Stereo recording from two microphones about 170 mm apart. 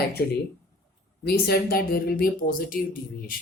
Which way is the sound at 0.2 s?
65° left (ahead or behind).